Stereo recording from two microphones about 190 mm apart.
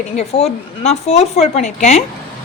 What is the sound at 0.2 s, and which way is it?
A woman's voice, 35° left (ahead or behind).